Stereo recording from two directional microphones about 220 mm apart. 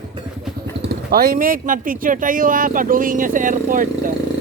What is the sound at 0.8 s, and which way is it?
Speech, 45° right (ahead or behind).